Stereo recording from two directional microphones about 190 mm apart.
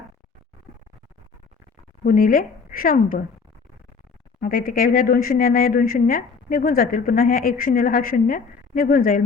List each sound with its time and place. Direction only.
2.0 s speech: 45° left (ahead or behind)
4.4 s speech: 50° left (ahead or behind)